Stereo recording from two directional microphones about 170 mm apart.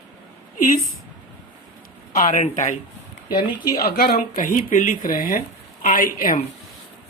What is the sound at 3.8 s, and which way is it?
Speech, 65° left (ahead or behind).